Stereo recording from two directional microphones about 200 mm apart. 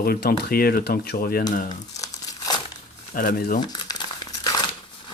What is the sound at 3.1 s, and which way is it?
Speech, 45° left (ahead or behind).